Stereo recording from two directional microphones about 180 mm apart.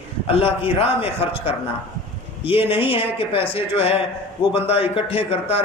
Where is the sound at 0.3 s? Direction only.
35° left (ahead or behind).